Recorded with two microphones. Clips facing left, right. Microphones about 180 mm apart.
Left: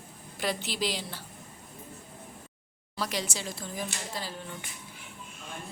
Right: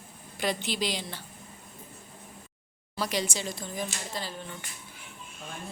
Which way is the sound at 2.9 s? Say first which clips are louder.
Right 3 dB; centre (ahead or behind).